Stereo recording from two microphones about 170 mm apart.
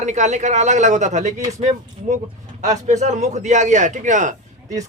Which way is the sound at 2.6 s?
45° right (ahead or behind).